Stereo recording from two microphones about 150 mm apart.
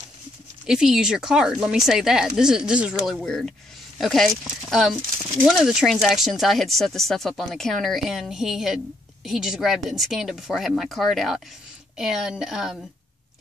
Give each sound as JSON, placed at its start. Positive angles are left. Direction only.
{"t": 0.7, "sound": "speech", "side_deg": -5}